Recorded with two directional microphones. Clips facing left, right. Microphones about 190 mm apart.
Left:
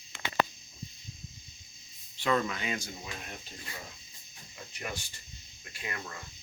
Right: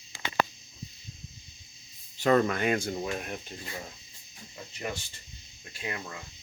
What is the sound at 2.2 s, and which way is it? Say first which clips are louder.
Speech: right 6 dB; 45° right (ahead or behind).